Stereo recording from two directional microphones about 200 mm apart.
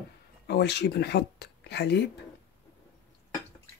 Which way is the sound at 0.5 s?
55° left (ahead or behind).